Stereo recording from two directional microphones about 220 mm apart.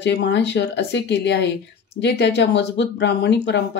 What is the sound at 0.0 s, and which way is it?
Speech, 50° left (ahead or behind).